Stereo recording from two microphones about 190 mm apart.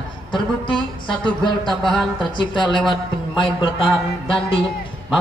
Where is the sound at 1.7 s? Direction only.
Centre (ahead or behind).